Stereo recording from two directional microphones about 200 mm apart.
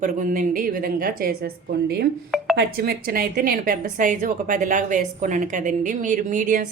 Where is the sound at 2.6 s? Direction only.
50° right (ahead or behind).